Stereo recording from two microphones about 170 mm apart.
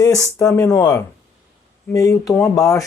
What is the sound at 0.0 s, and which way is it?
Speech, 20° left (ahead or behind).